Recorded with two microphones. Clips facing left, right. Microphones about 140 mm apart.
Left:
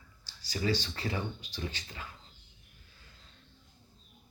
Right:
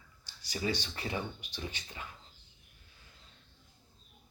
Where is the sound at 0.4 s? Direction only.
20° right (ahead or behind).